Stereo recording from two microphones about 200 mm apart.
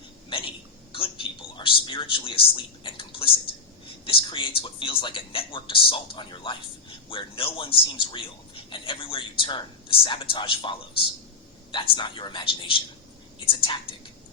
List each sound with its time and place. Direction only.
0.3 s hiccup: 25° left (ahead or behind)
0.9 s a sound: 25° left (ahead or behind)
4.0 s a man's voice: 25° left (ahead or behind)